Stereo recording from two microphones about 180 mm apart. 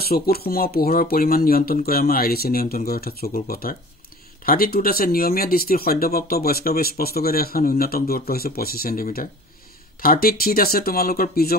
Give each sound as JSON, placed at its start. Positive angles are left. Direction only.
{"t": 0.0, "sound": "speech", "side_deg": 60}